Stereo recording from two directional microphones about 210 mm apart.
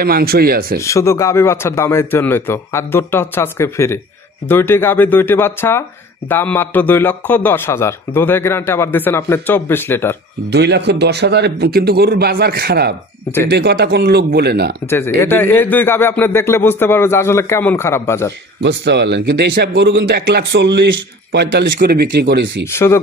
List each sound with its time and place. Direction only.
0.0 s a man's voice: 45° right (ahead or behind)
0.7 s speech: 15° left (ahead or behind)
10.5 s a man's voice: 55° right (ahead or behind)
15.1 s speech: 10° left (ahead or behind)
18.6 s speech: 55° right (ahead or behind)
22.7 s speech: 10° left (ahead or behind)